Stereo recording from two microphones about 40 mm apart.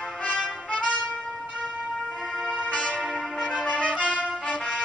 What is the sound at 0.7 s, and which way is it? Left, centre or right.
Music, left.